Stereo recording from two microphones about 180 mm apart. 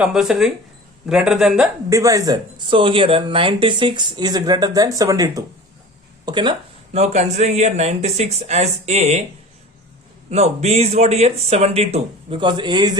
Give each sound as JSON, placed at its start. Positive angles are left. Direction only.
{"t": 0.0, "sound": "a man's voice", "side_deg": -5}
{"t": 1.9, "sound": "speech", "side_deg": -20}
{"t": 6.9, "sound": "speech", "side_deg": -40}
{"t": 10.2, "sound": "speech", "side_deg": -35}